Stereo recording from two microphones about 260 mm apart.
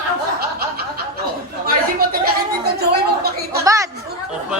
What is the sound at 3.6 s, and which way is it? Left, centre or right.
Speech, centre.